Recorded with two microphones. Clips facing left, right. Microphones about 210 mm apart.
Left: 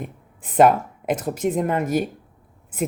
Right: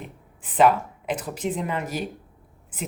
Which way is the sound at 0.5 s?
50° left (ahead or behind).